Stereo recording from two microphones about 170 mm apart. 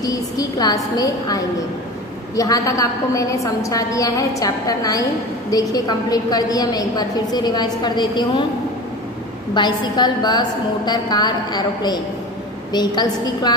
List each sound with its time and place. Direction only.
0.0 s a sound: 20° left (ahead or behind)
0.9 s a woman's voice: 20° left (ahead or behind)
9.5 s a woman's voice: 25° left (ahead or behind)